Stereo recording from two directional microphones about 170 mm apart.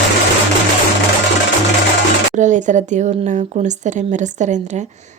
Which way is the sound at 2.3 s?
45° right (ahead or behind).